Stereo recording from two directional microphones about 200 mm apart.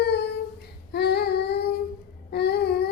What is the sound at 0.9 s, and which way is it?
Child singing, 55° left (ahead or behind).